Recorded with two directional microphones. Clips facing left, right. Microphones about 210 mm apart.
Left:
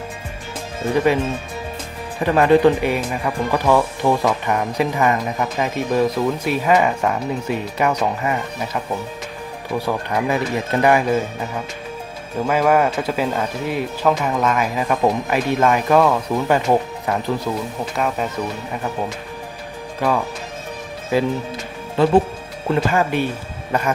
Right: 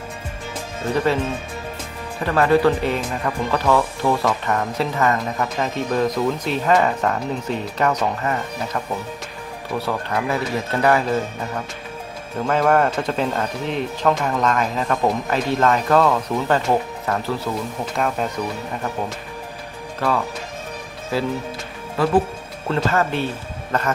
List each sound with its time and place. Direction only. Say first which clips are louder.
0.9 s speech: left 3 dB; 15° left (ahead or behind)
2.2 s speech: left 3 dB; 15° left (ahead or behind)
17.9 s speech: even; centre (ahead or behind)
20.0 s speech: left 2 dB; 15° left (ahead or behind)
21.9 s speech: left 3 dB; 25° left (ahead or behind)
22.7 s speech: left 2 dB; 15° left (ahead or behind)